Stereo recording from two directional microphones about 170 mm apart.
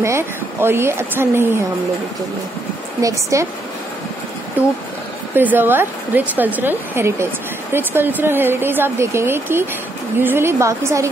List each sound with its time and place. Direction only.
0.0 s speech: 15° right (ahead or behind)
3.0 s speech: 20° right (ahead or behind)
4.6 s speech: 10° right (ahead or behind)